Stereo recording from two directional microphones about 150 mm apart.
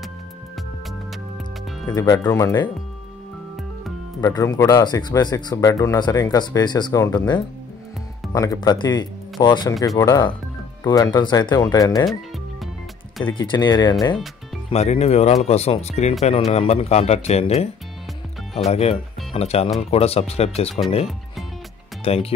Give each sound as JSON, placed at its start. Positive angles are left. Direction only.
{"t": 2.0, "sound": "speech", "side_deg": 25}
{"t": 4.2, "sound": "speech", "side_deg": 25}
{"t": 13.2, "sound": "speech", "side_deg": 30}
{"t": 14.7, "sound": "speech", "side_deg": 45}
{"t": 18.7, "sound": "speech", "side_deg": 45}
{"t": 22.0, "sound": "speech", "side_deg": 40}